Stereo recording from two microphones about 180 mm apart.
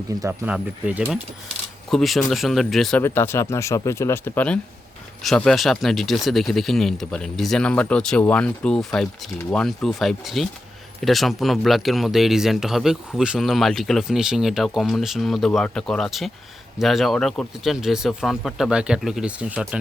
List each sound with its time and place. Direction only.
0.1 s speech: 20° right (ahead or behind)
0.4 s speech: 5° right (ahead or behind)
3.0 s speech: 15° left (ahead or behind); by 19.8 s 5° right (ahead or behind)